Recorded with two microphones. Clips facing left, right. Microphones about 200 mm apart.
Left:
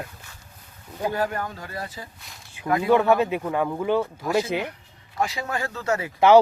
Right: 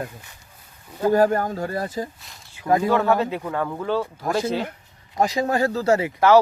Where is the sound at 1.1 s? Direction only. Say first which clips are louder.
Right 10 dB; 45° right (ahead or behind).